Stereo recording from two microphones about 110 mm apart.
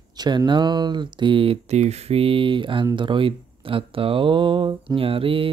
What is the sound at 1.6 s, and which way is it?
Speech, 85° right.